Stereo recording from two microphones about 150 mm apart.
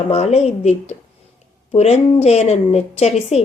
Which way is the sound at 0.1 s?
45° left (ahead or behind).